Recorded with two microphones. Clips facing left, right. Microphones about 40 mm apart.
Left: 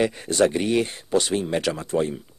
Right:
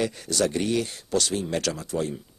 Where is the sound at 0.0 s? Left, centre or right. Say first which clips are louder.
Left 5 dB; left.